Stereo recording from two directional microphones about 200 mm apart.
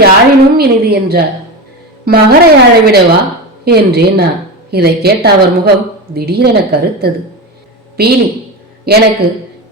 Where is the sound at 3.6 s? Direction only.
50° right (ahead or behind).